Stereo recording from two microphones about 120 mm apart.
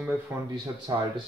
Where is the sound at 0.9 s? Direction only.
35° right (ahead or behind).